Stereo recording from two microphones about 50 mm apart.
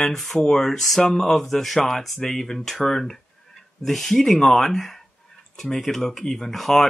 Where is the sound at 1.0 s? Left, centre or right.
Centre.